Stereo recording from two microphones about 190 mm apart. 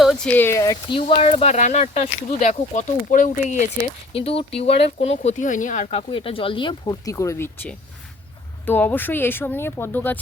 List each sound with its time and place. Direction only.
0.0 s speech: centre (ahead or behind); by 0.9 s 15° left (ahead or behind)
0.9 s speech: 30° left (ahead or behind)
4.1 s speech: 30° left (ahead or behind)
6.1 s speech: 25° left (ahead or behind); by 10.2 s 10° left (ahead or behind)